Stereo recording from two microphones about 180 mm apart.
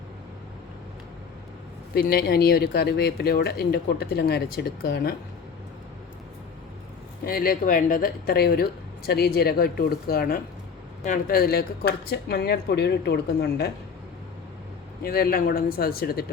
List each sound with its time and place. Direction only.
1.9 s speech: 60° left (ahead or behind)
7.3 s speech: 55° left (ahead or behind)
15.0 s speech: 55° left (ahead or behind)